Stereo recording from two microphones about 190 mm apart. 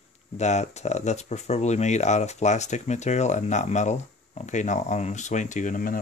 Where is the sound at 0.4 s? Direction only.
35° left (ahead or behind).